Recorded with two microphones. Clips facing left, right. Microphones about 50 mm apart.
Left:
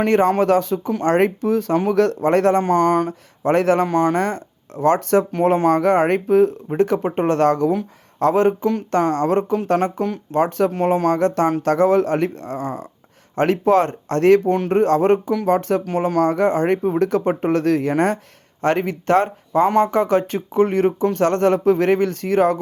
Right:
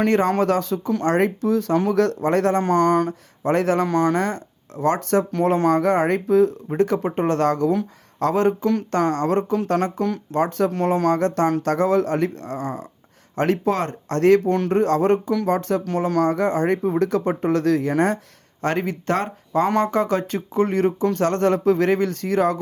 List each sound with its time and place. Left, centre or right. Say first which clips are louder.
0.5 s speech: left 3 dB; left
2.6 s speech: left 1 dB; centre
3.4 s speech: left 3 dB; left
3.8 s speech: left 2 dB; left
5.3 s speech: left 2 dB; left
5.8 s speech: left 3 dB; left
9.7 s speech: left 3 dB; centre
10.3 s speech: left 3 dB; left
10.7 s speech: left 2 dB; centre
11.2 s speech: left 2 dB; left
15.8 s speech: left 2 dB; centre
16.3 s speech: left 3 dB; left
19.6 s speech: left 4 dB; centre
19.9 s speech: left 3 dB; left